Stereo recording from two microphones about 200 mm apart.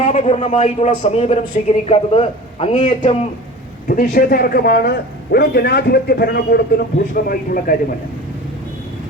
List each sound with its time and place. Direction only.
0.0 s a man's voice: 30° left (ahead or behind)
3.8 s a man's voice: 45° left (ahead or behind)